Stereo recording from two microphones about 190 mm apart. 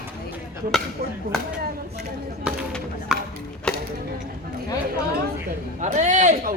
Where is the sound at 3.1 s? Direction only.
5° right (ahead or behind).